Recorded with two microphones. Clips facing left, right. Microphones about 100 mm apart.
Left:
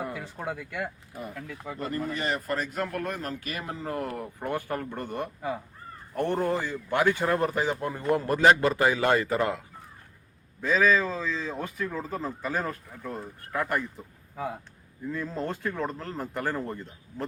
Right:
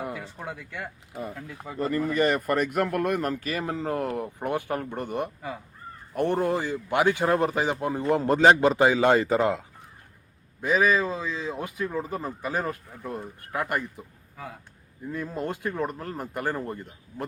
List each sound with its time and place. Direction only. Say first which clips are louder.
0.3 s speech: left 3 dB; 10° left (ahead or behind)
1.1 s speech: right 2 dB; 20° right (ahead or behind)
1.8 s speech: right 7 dB; 40° right (ahead or behind); by 3.3 s 60° right (ahead or behind)
3.4 s speech: right 5 dB; 35° right (ahead or behind)
3.9 s speech: right 4 dB; 20° right (ahead or behind)
15.0 s speech: right 1 dB; 15° right (ahead or behind)